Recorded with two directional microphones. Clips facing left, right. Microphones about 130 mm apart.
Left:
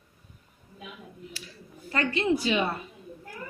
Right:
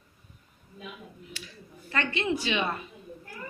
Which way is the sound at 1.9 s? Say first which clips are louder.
Left 3 dB; 35° left (ahead or behind).